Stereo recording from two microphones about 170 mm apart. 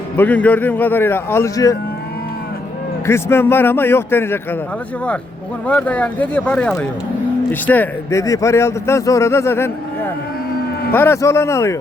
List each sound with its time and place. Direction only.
0.2 s a man's voice: 10° left (ahead or behind)
3.1 s a man's voice: 15° left (ahead or behind)
5.6 s a man's voice: 10° left (ahead or behind)